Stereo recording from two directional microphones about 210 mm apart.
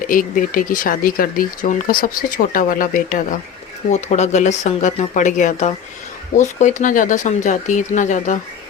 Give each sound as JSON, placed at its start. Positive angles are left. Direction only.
{"t": 0.1, "sound": "speech", "side_deg": 40}